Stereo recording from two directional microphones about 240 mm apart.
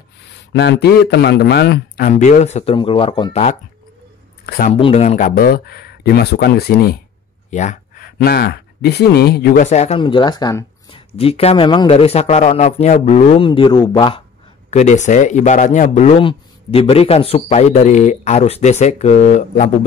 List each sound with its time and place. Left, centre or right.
0.5 s a man's voice: left
4.5 s a man's voice: left
4.7 s a man's voice: left
14.7 s speech: left